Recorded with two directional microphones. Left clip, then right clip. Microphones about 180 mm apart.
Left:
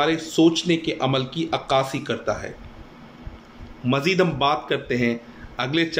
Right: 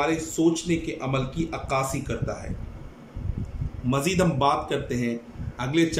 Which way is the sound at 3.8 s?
20° right (ahead or behind).